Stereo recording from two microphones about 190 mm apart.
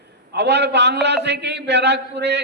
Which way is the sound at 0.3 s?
65° right (ahead or behind).